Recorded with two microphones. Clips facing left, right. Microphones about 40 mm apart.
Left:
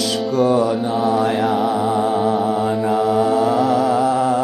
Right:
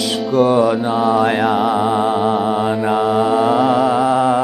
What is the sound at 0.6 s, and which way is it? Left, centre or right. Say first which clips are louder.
Mantra: right 3 dB; centre.